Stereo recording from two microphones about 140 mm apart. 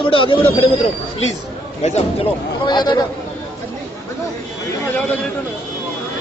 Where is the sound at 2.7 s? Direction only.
30° left (ahead or behind).